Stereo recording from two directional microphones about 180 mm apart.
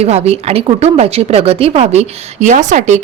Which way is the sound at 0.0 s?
35° right (ahead or behind).